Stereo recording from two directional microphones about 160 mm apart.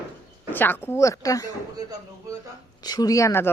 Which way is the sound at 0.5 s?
10° left (ahead or behind).